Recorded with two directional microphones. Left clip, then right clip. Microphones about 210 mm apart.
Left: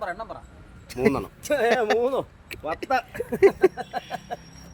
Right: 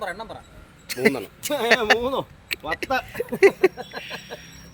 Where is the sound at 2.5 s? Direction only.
5° left (ahead or behind).